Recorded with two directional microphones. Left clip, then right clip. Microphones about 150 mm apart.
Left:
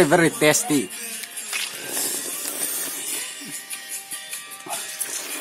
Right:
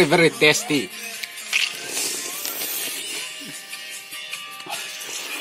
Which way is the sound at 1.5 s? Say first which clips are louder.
Right 7 dB; 20° left (ahead or behind).